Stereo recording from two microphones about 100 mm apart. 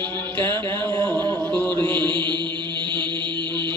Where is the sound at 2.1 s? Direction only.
50° right (ahead or behind).